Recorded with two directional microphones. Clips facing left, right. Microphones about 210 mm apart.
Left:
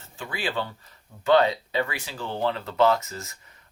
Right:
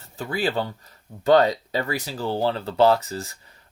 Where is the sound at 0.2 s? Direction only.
40° right (ahead or behind).